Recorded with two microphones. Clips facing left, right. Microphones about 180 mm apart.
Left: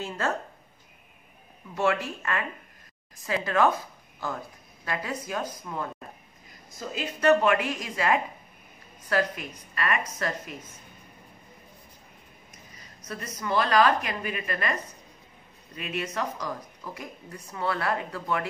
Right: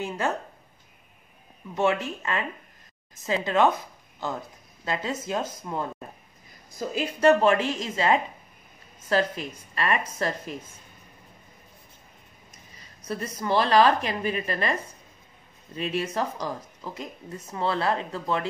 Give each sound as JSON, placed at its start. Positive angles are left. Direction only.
{"t": 0.0, "sound": "speech", "side_deg": -15}
{"t": 1.8, "sound": "speech", "side_deg": -20}
{"t": 4.8, "sound": "speech", "side_deg": -25}
{"t": 13.0, "sound": "speech", "side_deg": -30}